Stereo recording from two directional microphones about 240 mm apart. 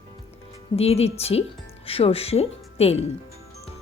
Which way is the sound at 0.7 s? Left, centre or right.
Left.